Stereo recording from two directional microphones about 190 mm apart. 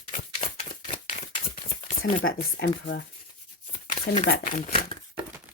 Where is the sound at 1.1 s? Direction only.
40° left (ahead or behind).